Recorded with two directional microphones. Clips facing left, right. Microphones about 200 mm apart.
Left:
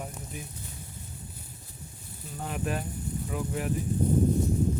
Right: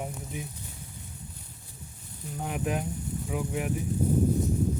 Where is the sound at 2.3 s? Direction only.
10° right (ahead or behind).